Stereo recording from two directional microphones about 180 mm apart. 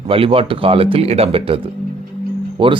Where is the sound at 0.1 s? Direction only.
30° right (ahead or behind).